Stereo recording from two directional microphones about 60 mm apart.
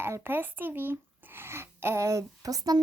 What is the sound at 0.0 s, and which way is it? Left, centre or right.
A woman's voice, right.